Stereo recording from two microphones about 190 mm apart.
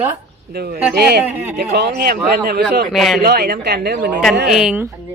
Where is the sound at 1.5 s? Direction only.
60° right (ahead or behind).